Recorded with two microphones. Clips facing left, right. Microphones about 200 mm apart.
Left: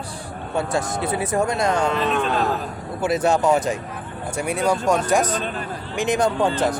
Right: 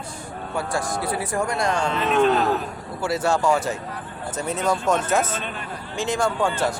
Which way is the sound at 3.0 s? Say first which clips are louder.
Left 3 dB; 20° left (ahead or behind).